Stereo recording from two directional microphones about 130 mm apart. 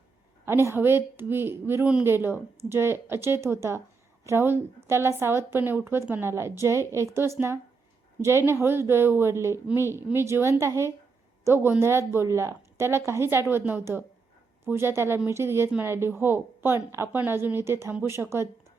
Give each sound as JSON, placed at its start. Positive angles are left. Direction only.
{"t": 0.4, "sound": "a woman's voice", "side_deg": -20}